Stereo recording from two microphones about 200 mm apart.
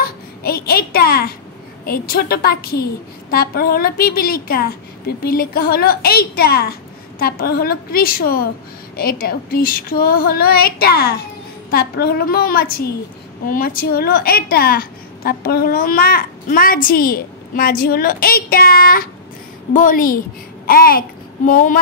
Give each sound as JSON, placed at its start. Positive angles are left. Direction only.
{"t": 0.4, "sound": "a child's voice", "side_deg": 50}
{"t": 21.5, "sound": "female singing", "side_deg": 40}